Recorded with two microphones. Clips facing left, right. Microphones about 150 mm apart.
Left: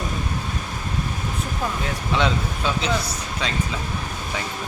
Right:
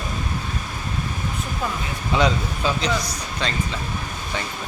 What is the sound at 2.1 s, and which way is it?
Speech, centre (ahead or behind).